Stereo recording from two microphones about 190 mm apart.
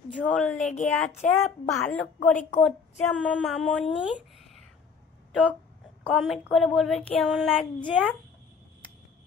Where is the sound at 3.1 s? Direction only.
5° left (ahead or behind).